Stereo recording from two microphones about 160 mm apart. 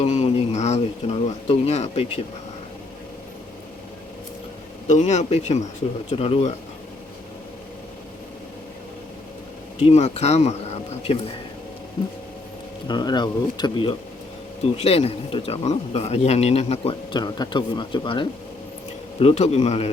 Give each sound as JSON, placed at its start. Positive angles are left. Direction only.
{"t": 0.0, "sound": "speech", "side_deg": 45}
{"t": 4.9, "sound": "speech", "side_deg": 50}
{"t": 9.8, "sound": "speech", "side_deg": 45}
{"t": 12.9, "sound": "speech", "side_deg": 25}
{"t": 14.6, "sound": "speech", "side_deg": 40}
{"t": 17.1, "sound": "speech", "side_deg": 25}
{"t": 19.2, "sound": "speech", "side_deg": 40}